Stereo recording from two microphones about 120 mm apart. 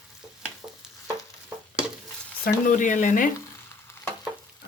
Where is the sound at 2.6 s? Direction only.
90° left.